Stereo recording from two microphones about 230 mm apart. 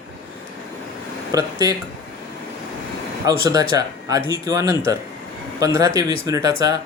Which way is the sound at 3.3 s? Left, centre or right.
Centre.